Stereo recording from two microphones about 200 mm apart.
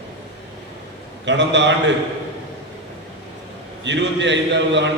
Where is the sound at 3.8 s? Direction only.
65° right (ahead or behind).